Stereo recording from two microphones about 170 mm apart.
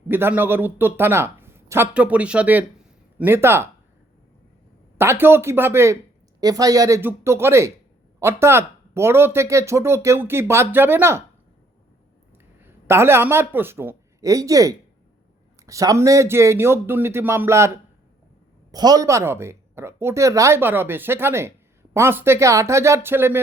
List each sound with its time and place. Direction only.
0.1 s speech: 10° right (ahead or behind)
4.9 s speech: 15° right (ahead or behind)
12.5 s a man's voice: 15° right (ahead or behind)
18.7 s speech: 20° right (ahead or behind)